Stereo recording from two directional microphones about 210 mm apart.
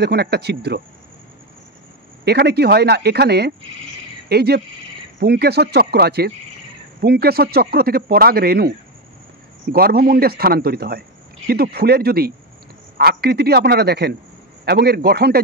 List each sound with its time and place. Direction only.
0.0 s a man's voice: 50° right (ahead or behind)
2.2 s a man's voice: 50° right (ahead or behind)